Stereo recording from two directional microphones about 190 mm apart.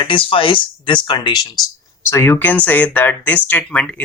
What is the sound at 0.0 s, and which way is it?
A woman's voice, 25° left (ahead or behind).